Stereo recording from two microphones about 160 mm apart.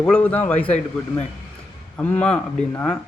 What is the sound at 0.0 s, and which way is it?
Speech, 5° left (ahead or behind).